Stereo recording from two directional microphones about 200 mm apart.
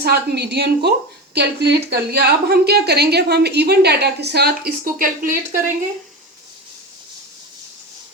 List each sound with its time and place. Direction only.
0.0 s a woman's voice: 55° right (ahead or behind)